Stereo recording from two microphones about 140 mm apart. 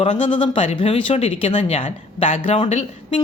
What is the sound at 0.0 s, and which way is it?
Speech, 45° left (ahead or behind).